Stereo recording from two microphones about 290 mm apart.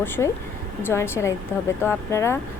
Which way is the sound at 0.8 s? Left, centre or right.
Centre.